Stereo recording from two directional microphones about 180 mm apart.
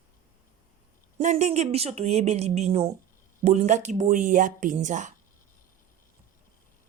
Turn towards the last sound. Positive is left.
turn(degrees=-45)  # may be behind; listen again after turning